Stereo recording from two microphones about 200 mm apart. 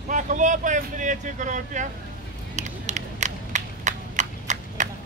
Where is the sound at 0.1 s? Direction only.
40° right (ahead or behind).